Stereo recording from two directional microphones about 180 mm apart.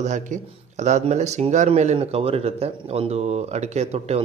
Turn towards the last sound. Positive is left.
turn(degrees=-35)  # may be behind; listen again after turning